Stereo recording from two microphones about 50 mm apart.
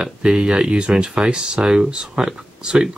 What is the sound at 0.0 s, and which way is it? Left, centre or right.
Speech, centre.